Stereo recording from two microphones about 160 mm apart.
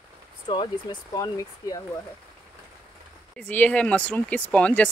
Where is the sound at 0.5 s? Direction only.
30° left (ahead or behind).